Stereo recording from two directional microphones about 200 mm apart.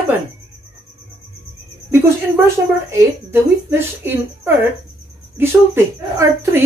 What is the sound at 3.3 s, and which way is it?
Speech, 10° right (ahead or behind).